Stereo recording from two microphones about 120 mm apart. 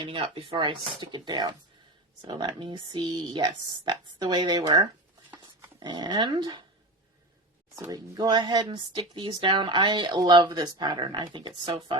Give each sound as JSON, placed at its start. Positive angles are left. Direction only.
{"t": 0.0, "sound": "speech", "side_deg": -45}
{"t": 7.9, "sound": "speech", "side_deg": -30}